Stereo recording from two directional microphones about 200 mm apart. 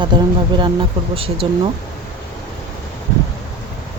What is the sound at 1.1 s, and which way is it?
Speech, 25° right (ahead or behind).